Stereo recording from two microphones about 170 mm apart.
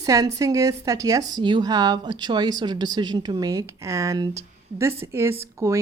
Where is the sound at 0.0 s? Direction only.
20° right (ahead or behind).